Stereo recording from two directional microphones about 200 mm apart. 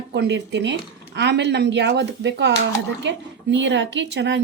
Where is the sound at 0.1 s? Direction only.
60° right (ahead or behind).